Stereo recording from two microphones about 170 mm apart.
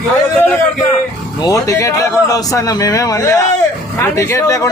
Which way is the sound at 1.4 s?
20° left (ahead or behind).